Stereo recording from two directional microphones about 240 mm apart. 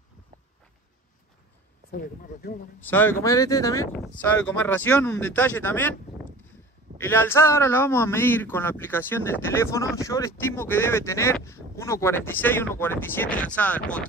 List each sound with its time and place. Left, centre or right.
1.9 s speech: left
2.8 s speech: centre
7.0 s speech: centre